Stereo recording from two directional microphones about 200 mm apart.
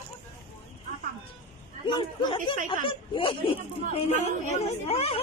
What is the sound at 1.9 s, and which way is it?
Speech, 25° left (ahead or behind).